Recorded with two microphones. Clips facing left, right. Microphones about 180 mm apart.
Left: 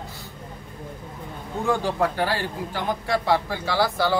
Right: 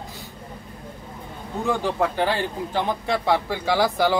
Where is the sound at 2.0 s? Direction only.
20° right (ahead or behind).